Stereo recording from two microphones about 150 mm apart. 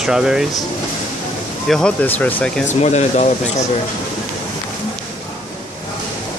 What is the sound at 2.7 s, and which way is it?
Speech, 50° left (ahead or behind).